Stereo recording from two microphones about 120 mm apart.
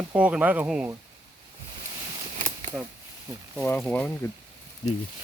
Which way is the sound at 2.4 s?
90° right.